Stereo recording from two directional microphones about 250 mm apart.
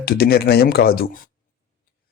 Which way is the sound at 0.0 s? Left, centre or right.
Left.